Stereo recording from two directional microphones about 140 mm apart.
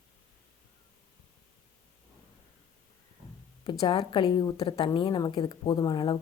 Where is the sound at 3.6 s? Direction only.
35° left (ahead or behind).